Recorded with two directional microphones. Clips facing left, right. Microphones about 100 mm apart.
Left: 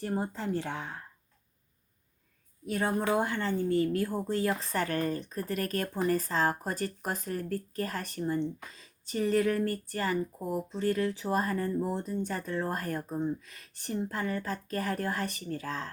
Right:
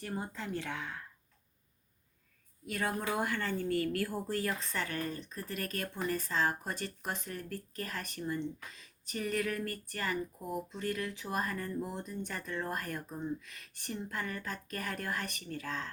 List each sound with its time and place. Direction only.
0.2 s speech: 35° left (ahead or behind)
2.6 s speech: 30° left (ahead or behind)
4.6 s speech: 40° left (ahead or behind)